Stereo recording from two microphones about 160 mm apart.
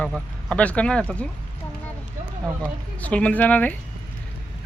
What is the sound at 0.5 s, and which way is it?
Speech, 10° left (ahead or behind).